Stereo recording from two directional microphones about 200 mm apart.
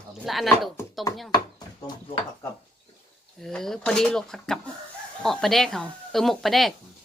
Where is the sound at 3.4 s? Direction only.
Centre (ahead or behind).